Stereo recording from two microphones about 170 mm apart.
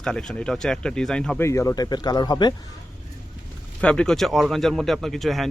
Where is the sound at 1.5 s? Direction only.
20° left (ahead or behind).